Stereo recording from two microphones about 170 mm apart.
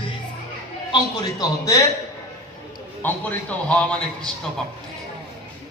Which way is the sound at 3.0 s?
10° left (ahead or behind).